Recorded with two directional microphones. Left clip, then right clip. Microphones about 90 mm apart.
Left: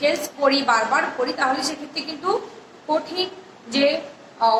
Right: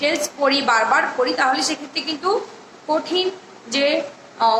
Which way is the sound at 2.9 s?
35° right (ahead or behind).